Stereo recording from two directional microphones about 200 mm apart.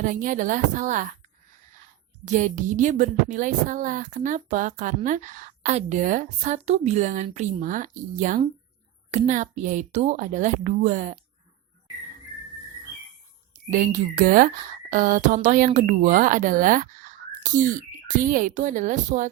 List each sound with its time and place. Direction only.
0.0 s speech: 40° right (ahead or behind)
2.2 s speech: 40° right (ahead or behind)
13.5 s speech: 40° right (ahead or behind)